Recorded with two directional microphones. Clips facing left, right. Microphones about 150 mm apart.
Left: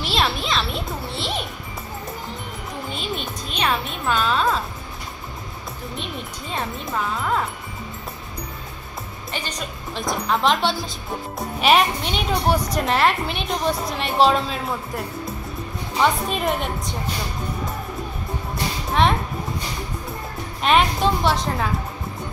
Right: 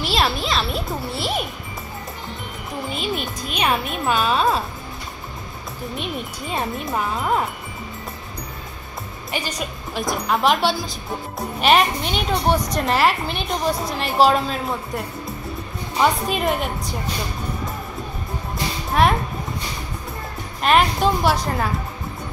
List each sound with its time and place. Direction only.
0.0 s music: centre (ahead or behind)
2.9 s a woman's voice: 5° right (ahead or behind)
6.5 s a woman's voice: 20° right (ahead or behind)
9.3 s a woman's voice: 10° right (ahead or behind)
16.0 s a woman's voice: centre (ahead or behind)
19.0 s a woman's voice: 5° right (ahead or behind)
20.6 s a woman's voice: centre (ahead or behind)